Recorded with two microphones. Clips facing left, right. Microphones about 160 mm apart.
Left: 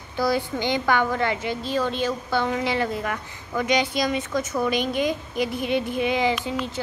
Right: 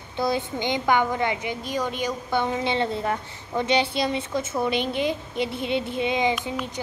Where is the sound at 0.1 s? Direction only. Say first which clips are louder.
Left 2 dB; 20° right (ahead or behind).